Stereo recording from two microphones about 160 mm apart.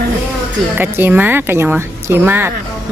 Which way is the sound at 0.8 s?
10° right (ahead or behind).